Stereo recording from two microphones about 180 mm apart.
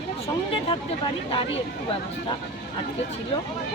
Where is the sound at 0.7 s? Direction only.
25° left (ahead or behind).